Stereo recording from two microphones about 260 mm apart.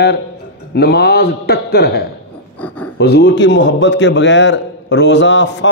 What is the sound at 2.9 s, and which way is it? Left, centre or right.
A man's voice, left.